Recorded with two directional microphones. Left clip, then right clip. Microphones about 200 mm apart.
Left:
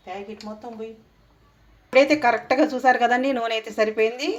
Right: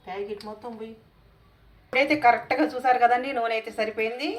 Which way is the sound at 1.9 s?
45° left (ahead or behind).